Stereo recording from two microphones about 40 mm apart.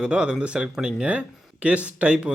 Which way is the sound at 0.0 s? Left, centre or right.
Right.